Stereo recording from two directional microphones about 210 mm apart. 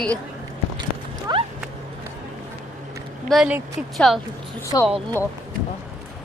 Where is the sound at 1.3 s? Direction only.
20° right (ahead or behind).